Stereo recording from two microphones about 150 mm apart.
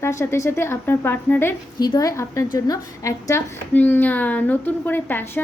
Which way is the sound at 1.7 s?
25° left (ahead or behind).